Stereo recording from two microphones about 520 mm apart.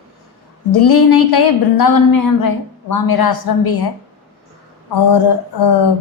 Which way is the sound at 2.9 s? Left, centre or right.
Left.